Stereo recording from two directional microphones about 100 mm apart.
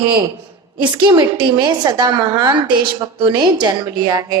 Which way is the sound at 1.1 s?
45° right (ahead or behind).